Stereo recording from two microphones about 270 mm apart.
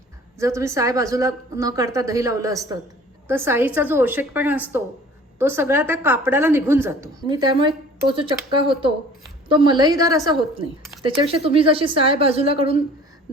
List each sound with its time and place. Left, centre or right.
0.3 s a woman's voice: centre